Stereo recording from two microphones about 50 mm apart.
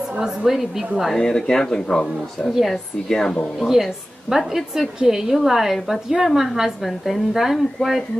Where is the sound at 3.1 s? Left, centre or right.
Centre.